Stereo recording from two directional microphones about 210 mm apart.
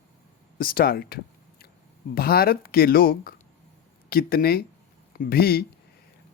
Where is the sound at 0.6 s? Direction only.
45° left (ahead or behind).